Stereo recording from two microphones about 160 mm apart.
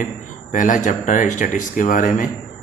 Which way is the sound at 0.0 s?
50° left (ahead or behind).